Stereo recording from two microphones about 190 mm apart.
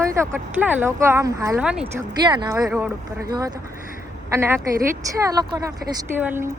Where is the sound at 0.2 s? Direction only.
10° right (ahead or behind).